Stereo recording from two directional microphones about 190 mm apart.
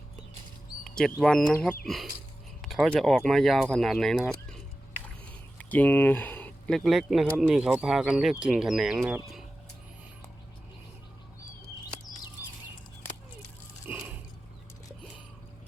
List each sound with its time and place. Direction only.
0.9 s speech: centre (ahead or behind)
5.5 s speech: 10° left (ahead or behind)
13.9 s a sound: 10° right (ahead or behind)